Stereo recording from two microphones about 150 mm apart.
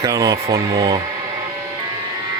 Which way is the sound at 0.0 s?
25° right (ahead or behind).